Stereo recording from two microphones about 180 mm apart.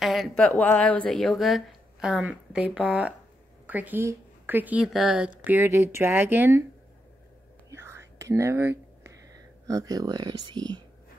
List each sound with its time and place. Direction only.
0.0 s speech: centre (ahead or behind)
7.7 s whispering: 15° right (ahead or behind)
9.7 s speech: 20° right (ahead or behind)